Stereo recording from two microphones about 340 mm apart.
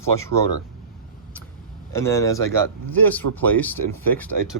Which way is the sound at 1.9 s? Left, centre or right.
Centre.